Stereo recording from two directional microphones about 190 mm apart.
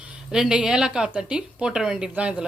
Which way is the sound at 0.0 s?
5° right (ahead or behind).